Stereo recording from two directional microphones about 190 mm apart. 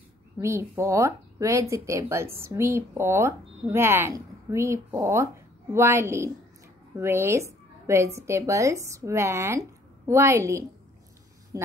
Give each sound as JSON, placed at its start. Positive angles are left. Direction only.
{"t": 0.4, "sound": "a woman's voice", "side_deg": -15}